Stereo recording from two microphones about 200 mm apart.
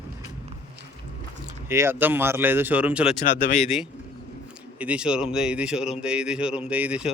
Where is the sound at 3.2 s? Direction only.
35° left (ahead or behind).